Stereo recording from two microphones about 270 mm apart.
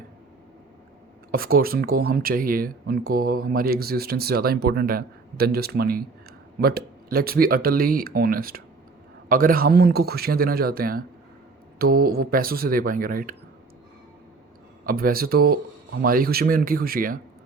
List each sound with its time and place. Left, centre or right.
1.3 s speech: right
14.8 s speech: right